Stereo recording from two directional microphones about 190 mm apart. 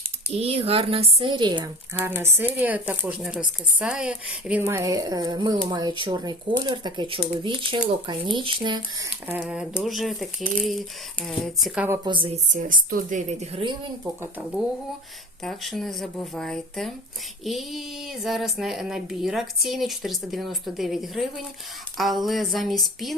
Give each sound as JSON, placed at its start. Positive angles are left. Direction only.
{"t": 0.3, "sound": "speech", "side_deg": -30}
{"t": 2.2, "sound": "speech", "side_deg": -10}
{"t": 9.2, "sound": "speech", "side_deg": -10}
{"t": 12.0, "sound": "speech", "side_deg": -25}
{"t": 12.5, "sound": "speech", "side_deg": -45}
{"t": 14.0, "sound": "speech", "side_deg": -10}
{"t": 15.4, "sound": "speech", "side_deg": 0}